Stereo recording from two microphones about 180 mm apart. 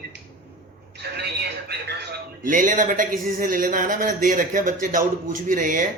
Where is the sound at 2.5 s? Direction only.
45° right (ahead or behind).